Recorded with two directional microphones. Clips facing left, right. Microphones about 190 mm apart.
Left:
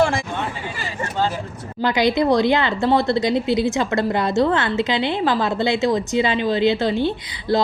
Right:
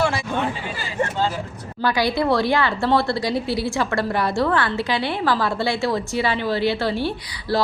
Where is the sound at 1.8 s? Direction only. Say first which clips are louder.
Left 3 dB; 20° left (ahead or behind).